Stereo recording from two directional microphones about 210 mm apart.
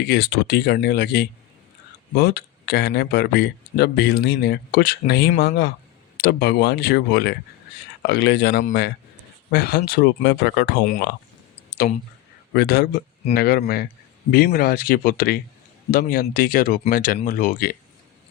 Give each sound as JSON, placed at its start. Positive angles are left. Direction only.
{"t": 0.0, "sound": "speech", "side_deg": 50}
{"t": 12.5, "sound": "speech", "side_deg": 50}